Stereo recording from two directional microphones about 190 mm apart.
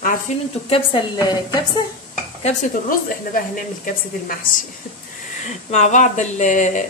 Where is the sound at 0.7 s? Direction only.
25° left (ahead or behind).